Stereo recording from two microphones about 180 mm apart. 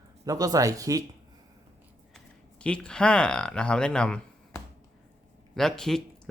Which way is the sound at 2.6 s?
5° left (ahead or behind).